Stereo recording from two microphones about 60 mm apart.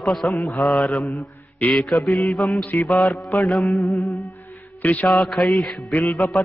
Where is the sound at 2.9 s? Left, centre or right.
Centre.